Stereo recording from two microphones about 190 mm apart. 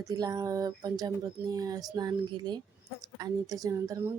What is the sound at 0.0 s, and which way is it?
Speech, 20° right (ahead or behind).